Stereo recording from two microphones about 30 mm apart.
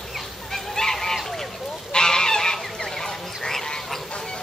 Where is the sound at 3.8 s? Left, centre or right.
Centre.